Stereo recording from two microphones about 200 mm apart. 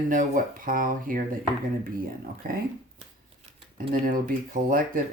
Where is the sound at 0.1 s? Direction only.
45° right (ahead or behind).